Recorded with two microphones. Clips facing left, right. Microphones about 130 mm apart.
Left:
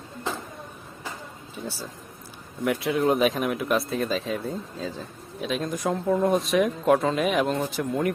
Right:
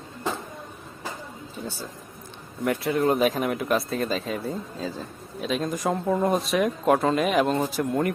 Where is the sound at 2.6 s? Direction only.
Centre (ahead or behind).